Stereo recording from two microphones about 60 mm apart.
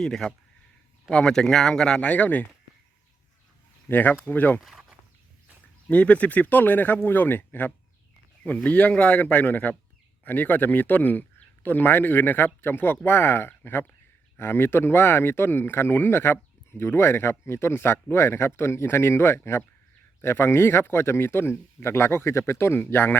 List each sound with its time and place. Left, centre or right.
0.0 s speech: centre
3.8 s speech: left
5.9 s speech: left
22.8 s speech: left